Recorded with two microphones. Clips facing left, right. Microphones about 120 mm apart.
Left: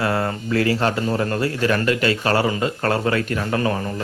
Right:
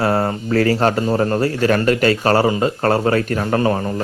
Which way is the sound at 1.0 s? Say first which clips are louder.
Right 4 dB; 30° right (ahead or behind).